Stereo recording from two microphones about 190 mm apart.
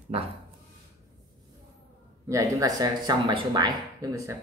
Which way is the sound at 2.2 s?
15° right (ahead or behind).